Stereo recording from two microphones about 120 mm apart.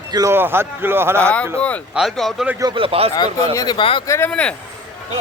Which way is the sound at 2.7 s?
50° right (ahead or behind).